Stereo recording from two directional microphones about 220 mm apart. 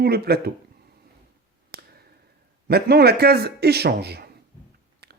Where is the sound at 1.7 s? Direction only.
45° right (ahead or behind).